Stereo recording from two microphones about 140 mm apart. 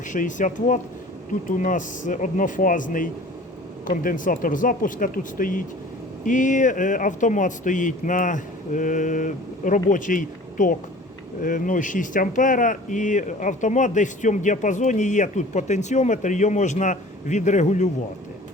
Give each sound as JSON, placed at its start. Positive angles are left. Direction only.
{"t": 0.1, "sound": "speech", "side_deg": 65}